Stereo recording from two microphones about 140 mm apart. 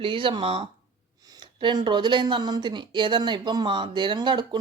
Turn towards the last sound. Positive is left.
turn(degrees=-35)  # may be behind; listen again after turning